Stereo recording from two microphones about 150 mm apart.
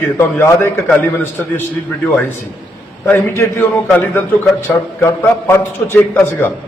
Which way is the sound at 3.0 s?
15° left (ahead or behind).